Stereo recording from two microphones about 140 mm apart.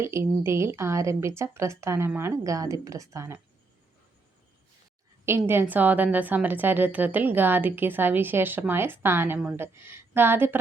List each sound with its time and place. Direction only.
0.0 s speech: 20° right (ahead or behind)
5.2 s a woman's voice: 15° right (ahead or behind)